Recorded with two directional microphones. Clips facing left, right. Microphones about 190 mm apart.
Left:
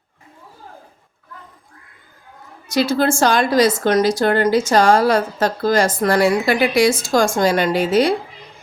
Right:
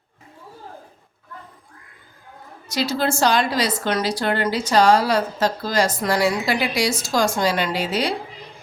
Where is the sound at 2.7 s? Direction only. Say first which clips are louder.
Left 5 dB; 50° left (ahead or behind).